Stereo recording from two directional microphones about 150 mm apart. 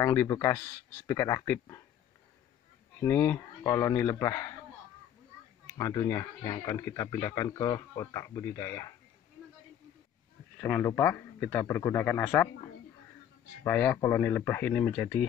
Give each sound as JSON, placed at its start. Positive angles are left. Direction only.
{"t": 0.0, "sound": "a man's voice", "side_deg": 20}
{"t": 3.0, "sound": "speech", "side_deg": 15}
{"t": 5.8, "sound": "speech", "side_deg": 20}
{"t": 10.6, "sound": "a man's voice", "side_deg": 15}
{"t": 13.7, "sound": "a man's voice", "side_deg": 15}